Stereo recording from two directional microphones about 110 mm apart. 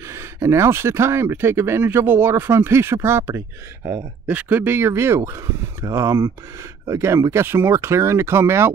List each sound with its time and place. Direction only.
0.0 s speech: 25° right (ahead or behind)
4.3 s speech: 15° right (ahead or behind)